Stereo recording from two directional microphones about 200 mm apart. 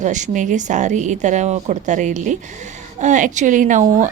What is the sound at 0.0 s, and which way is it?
A woman's voice, 40° right (ahead or behind).